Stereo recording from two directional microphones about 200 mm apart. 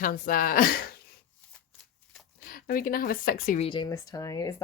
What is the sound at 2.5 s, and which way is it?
A woman's voice, 45° left (ahead or behind).